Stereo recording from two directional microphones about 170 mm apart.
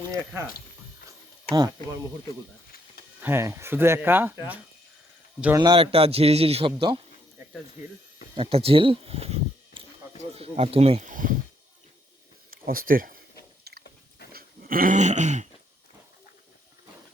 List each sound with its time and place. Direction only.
1.5 s speech: 25° right (ahead or behind)
3.2 s speech: 15° right (ahead or behind)
5.5 s a man's voice: 30° right (ahead or behind)
7.4 s a sound: 10° right (ahead or behind)
7.8 s speech: 10° right (ahead or behind)
8.4 s a man's voice: 35° right (ahead or behind)
12.5 s a sound: 55° right (ahead or behind)
13.7 s a sound: 70° right (ahead or behind)
14.3 s dog: 55° right (ahead or behind)